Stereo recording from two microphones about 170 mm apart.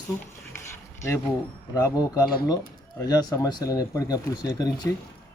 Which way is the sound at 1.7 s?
20° left (ahead or behind).